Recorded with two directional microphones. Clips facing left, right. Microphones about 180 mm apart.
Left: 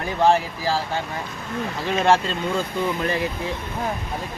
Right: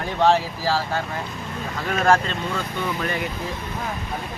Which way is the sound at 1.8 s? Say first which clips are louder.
Even; 25° left (ahead or behind).